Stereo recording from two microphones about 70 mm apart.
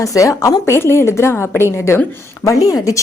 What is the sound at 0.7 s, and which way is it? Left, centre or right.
A woman's voice, left.